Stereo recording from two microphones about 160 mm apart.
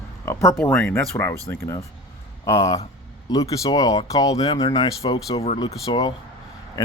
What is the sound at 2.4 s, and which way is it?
Speech, 20° left (ahead or behind).